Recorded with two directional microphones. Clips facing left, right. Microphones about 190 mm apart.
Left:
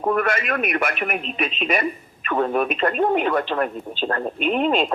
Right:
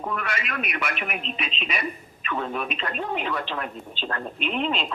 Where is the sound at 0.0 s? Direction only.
50° left (ahead or behind).